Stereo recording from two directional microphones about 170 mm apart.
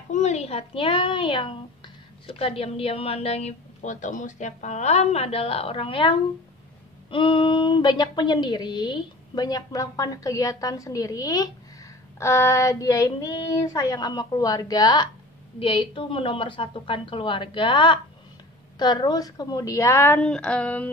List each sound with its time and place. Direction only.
0.1 s a child's voice: 40° left (ahead or behind); by 20.9 s 10° left (ahead or behind)